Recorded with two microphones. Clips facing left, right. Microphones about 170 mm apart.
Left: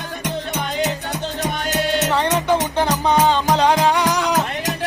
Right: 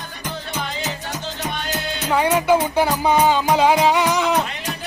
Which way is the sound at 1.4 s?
70° left (ahead or behind).